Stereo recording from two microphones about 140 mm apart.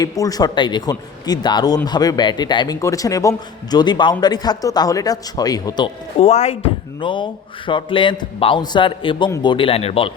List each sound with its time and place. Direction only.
0.0 s a man's voice: 25° left (ahead or behind)
6.1 s speech: 50° left (ahead or behind)
7.0 s a man's voice: 35° left (ahead or behind)